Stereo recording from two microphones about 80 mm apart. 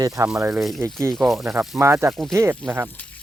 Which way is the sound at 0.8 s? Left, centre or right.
Right.